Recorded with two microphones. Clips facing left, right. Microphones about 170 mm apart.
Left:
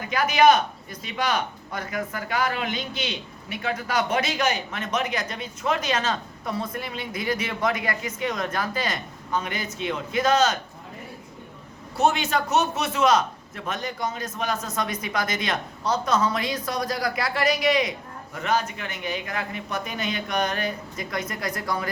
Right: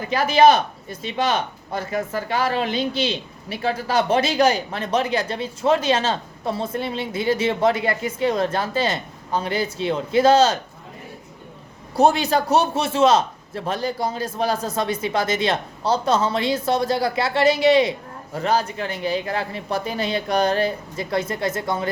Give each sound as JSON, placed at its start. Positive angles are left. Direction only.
{"t": 0.1, "sound": "speech", "side_deg": -30}
{"t": 11.9, "sound": "speech", "side_deg": -35}